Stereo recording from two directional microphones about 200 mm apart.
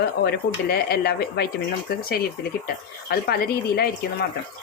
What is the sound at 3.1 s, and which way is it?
Speech, 50° left (ahead or behind).